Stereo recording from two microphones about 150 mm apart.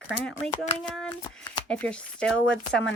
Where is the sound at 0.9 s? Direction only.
5° left (ahead or behind).